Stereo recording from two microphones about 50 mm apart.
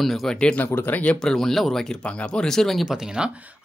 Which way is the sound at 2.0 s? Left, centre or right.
Left.